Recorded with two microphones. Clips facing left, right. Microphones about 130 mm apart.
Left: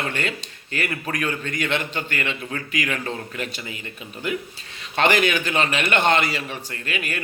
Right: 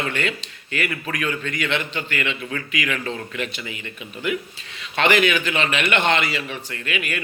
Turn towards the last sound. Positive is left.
turn(degrees=40)  # may be behind; listen again after turning